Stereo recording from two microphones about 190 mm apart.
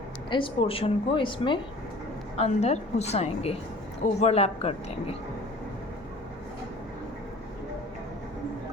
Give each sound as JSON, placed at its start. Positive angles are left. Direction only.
{"t": 0.3, "sound": "a woman's voice", "side_deg": 25}